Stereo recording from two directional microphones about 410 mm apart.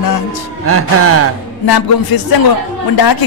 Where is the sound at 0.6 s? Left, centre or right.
Right.